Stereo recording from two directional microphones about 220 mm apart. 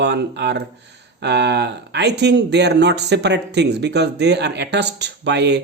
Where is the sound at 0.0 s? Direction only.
50° right (ahead or behind).